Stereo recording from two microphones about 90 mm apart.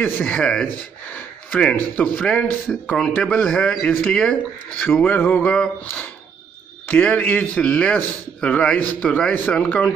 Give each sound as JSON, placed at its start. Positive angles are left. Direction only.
{"t": 0.0, "sound": "speech", "side_deg": 15}